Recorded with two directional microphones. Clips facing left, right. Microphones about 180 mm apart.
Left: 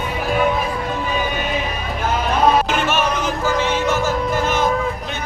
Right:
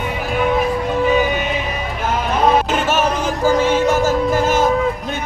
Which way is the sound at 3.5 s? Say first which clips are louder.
Right 6 dB; 45° right (ahead or behind).